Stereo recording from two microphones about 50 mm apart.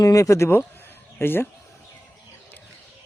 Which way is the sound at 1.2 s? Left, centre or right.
Left.